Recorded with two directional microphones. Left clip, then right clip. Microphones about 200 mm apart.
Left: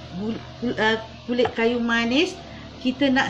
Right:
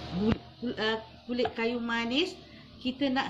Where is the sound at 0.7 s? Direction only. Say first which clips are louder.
Left 9 dB; 30° right (ahead or behind).